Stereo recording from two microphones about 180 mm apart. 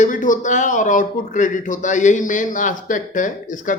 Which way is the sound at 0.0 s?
45° left (ahead or behind).